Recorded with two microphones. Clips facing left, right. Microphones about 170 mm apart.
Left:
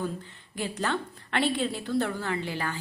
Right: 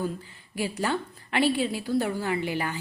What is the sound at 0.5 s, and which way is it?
A woman's voice, 10° right (ahead or behind).